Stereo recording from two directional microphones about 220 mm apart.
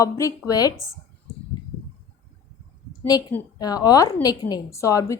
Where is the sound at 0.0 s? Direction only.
15° left (ahead or behind).